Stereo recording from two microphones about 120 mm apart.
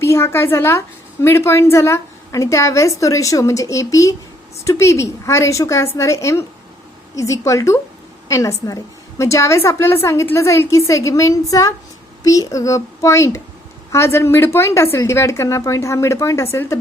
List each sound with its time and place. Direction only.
0.0 s a woman's voice: 20° left (ahead or behind)